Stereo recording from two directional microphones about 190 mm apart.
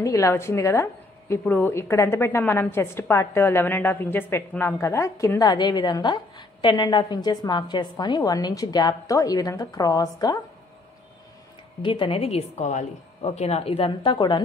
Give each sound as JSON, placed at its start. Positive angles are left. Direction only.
{"t": 0.0, "sound": "a woman's voice", "side_deg": 15}
{"t": 11.8, "sound": "a woman's voice", "side_deg": 25}